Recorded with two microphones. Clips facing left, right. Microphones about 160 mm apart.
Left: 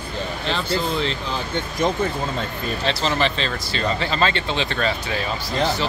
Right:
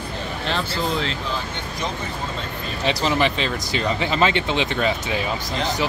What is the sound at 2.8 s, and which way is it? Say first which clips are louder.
Speech: right 2 dB; 15° right (ahead or behind).